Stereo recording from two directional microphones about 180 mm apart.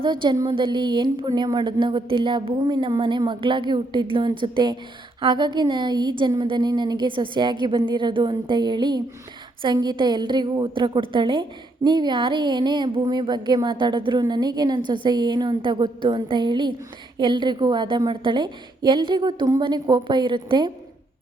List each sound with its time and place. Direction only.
0.0 s a woman's voice: 25° right (ahead or behind)